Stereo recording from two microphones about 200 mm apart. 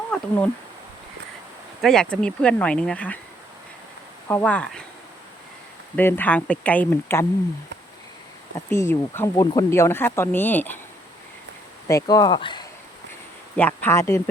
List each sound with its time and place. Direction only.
0.1 s speech: 5° left (ahead or behind)
1.8 s speech: centre (ahead or behind)
4.3 s speech: 10° left (ahead or behind)
6.0 s speech: 10° left (ahead or behind)
8.7 s speech: 10° left (ahead or behind)
11.9 s speech: 15° left (ahead or behind)
13.6 s speech: 10° left (ahead or behind)